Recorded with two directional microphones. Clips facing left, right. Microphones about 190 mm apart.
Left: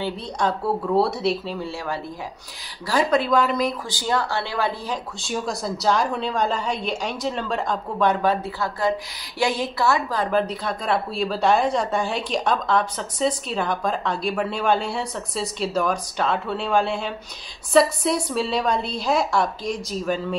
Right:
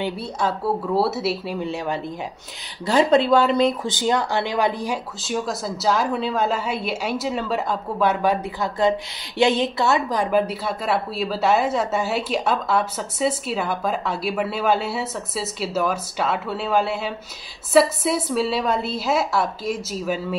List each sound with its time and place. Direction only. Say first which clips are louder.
0.4 s a woman's voice: even; 5° right (ahead or behind)
1.6 s speech: right 3 dB; 20° right (ahead or behind)
5.2 s a woman's voice: right 1 dB; centre (ahead or behind)